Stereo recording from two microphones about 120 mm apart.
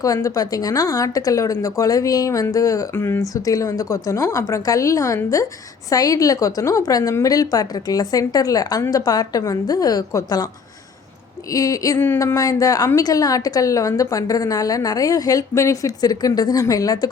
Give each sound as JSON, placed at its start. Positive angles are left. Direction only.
{"t": 0.0, "sound": "a woman's voice", "side_deg": 25}
{"t": 11.5, "sound": "a woman's voice", "side_deg": 30}